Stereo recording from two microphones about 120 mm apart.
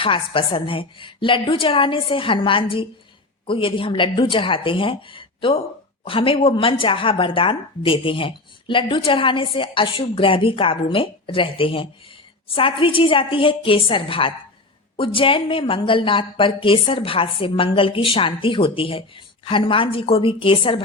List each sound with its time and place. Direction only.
0.0 s speech: 45° left (ahead or behind)